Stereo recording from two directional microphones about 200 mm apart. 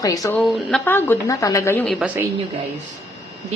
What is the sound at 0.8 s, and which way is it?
A woman's voice, 10° left (ahead or behind).